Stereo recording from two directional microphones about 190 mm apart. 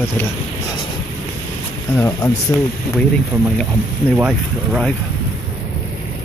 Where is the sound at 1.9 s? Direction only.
15° left (ahead or behind).